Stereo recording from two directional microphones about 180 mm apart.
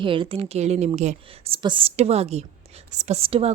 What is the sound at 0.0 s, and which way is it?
A woman's voice, 30° right (ahead or behind).